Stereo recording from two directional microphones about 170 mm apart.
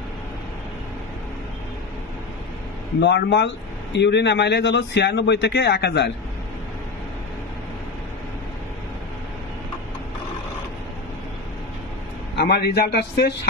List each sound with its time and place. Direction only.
3.0 s a man's voice: 90° left
12.4 s a man's voice: 75° left (ahead or behind)